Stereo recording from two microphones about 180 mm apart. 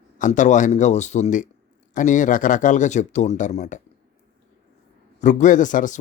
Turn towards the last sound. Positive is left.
turn(degrees=45)  # may be behind; listen again after turning